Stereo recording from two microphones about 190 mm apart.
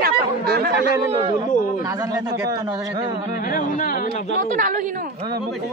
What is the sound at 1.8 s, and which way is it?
Speech, 20° right (ahead or behind).